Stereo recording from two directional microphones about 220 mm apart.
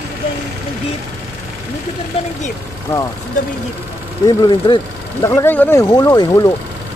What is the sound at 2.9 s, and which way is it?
Speech, 10° left (ahead or behind).